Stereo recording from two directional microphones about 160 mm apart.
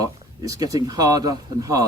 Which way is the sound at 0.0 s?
20° right (ahead or behind).